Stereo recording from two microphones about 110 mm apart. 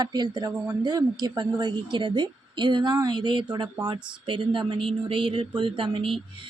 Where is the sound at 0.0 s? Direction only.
40° right (ahead or behind).